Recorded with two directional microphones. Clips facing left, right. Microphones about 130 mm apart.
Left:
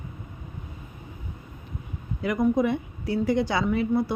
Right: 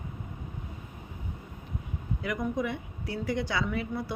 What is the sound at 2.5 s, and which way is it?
A woman's voice, 25° left (ahead or behind).